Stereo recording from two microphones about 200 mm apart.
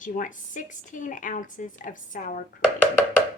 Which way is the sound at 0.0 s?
40° left (ahead or behind).